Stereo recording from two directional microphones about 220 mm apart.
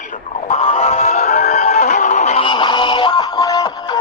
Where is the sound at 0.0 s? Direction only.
35° left (ahead or behind).